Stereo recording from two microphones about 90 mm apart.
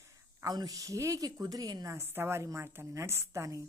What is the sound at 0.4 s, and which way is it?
Speech, 45° right (ahead or behind).